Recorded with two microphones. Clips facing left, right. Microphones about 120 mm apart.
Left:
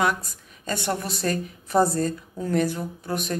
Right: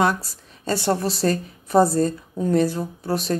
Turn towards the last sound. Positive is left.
turn(degrees=-30)  # may be behind; listen again after turning